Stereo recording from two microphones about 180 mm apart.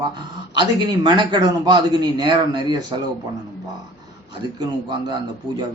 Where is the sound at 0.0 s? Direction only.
25° right (ahead or behind).